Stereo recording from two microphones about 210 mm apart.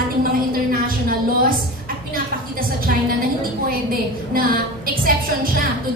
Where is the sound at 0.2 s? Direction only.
45° right (ahead or behind).